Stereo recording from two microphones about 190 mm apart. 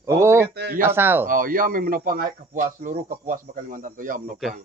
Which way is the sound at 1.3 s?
45° right (ahead or behind).